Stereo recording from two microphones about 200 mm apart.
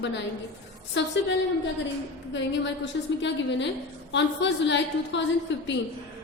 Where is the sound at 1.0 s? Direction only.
60° left (ahead or behind).